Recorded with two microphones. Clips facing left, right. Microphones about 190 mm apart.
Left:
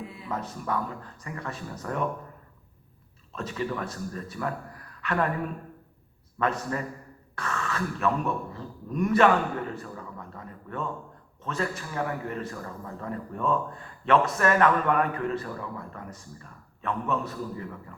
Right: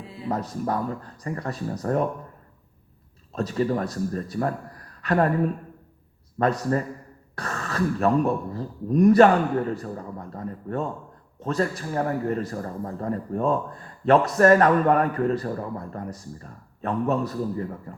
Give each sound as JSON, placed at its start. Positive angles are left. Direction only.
{"t": 0.0, "sound": "a man's voice", "side_deg": -30}
{"t": 3.3, "sound": "a man's voice", "side_deg": -40}
{"t": 6.4, "sound": "a man's voice", "side_deg": -40}